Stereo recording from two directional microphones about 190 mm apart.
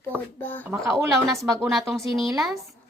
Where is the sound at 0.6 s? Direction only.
15° right (ahead or behind).